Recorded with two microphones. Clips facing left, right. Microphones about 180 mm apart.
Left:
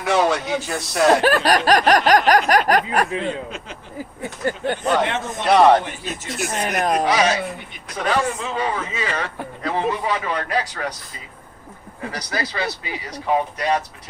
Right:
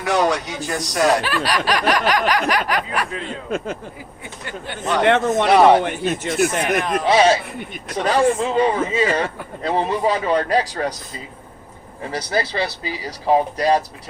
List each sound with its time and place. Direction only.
0.0 s speech: centre (ahead or behind)
1.2 s a sound: 45° left (ahead or behind)
3.5 s speech: 50° right (ahead or behind)
4.4 s a sound: 45° left (ahead or behind)
5.0 s speech: 60° right (ahead or behind)
5.5 s speech: 5° right (ahead or behind)
5.8 s speech: 60° right (ahead or behind)
7.1 s speech: 30° right (ahead or behind)
12.1 s speech: 30° right (ahead or behind)